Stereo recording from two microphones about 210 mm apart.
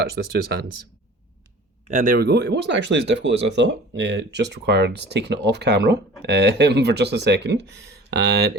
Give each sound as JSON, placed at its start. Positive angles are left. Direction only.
{"t": 0.2, "sound": "speech", "side_deg": -45}
{"t": 1.9, "sound": "speech", "side_deg": -40}